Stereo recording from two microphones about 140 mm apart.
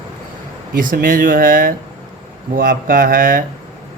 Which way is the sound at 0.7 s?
80° right.